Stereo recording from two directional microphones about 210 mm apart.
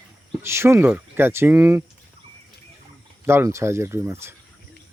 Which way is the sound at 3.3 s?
15° right (ahead or behind).